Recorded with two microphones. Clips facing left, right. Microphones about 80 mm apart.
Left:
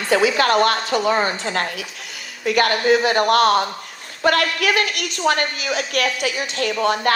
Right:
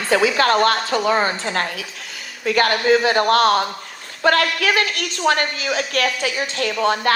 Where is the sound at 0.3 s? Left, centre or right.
Right.